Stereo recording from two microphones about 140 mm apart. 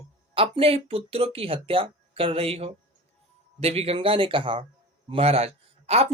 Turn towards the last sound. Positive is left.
turn(degrees=-45)  # may be behind; listen again after turning